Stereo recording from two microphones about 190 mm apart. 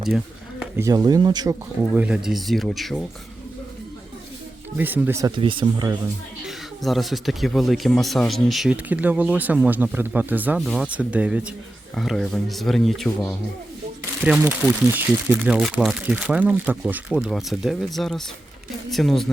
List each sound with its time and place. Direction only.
0.6 s speech: 15° right (ahead or behind)
1.9 s speech: 5° right (ahead or behind)
4.8 s speech: 10° right (ahead or behind)
5.3 s speech: 25° right (ahead or behind)
6.4 s speech: centre (ahead or behind)